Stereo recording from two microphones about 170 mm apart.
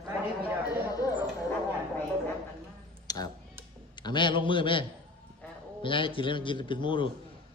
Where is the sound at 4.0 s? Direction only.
25° left (ahead or behind).